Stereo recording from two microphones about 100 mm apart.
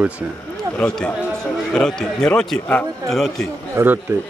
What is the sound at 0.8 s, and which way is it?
Speech, 10° left (ahead or behind).